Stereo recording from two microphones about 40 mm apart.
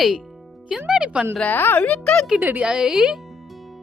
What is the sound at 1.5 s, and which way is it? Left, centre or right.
Speech, left.